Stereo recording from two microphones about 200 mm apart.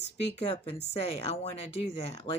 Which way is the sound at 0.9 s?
30° left (ahead or behind).